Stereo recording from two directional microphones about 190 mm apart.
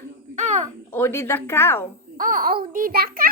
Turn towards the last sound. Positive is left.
turn(degrees=-50)  # may be behind; listen again after turning